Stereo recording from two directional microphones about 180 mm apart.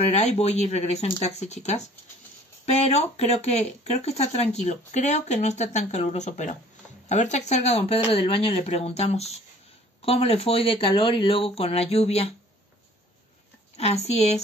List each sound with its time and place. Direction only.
0.1 s speech: 40° left (ahead or behind)
13.7 s speech: 35° left (ahead or behind)